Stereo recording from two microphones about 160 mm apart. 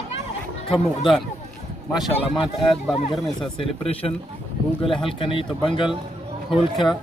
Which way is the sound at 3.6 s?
35° left (ahead or behind).